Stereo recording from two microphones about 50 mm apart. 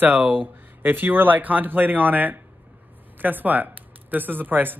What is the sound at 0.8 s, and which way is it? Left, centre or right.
Speech, right.